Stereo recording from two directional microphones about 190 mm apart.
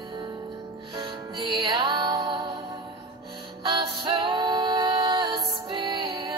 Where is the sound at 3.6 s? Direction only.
25° right (ahead or behind).